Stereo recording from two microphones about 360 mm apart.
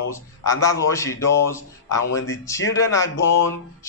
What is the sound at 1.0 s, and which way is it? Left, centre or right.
Speech, left.